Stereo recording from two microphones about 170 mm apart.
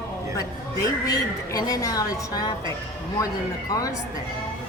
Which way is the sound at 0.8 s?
20° left (ahead or behind).